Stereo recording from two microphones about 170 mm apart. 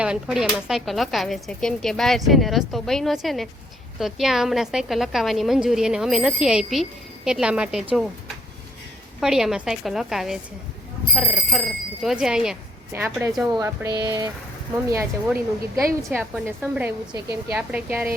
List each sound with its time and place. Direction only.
0.0 s speech: 5° right (ahead or behind)
9.2 s a woman's voice: 5° right (ahead or behind)
13.6 s a woman's voice: 20° right (ahead or behind)
16.0 s a woman's voice: centre (ahead or behind)